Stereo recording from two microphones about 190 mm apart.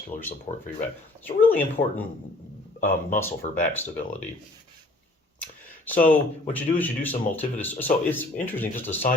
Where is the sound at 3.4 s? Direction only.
40° left (ahead or behind).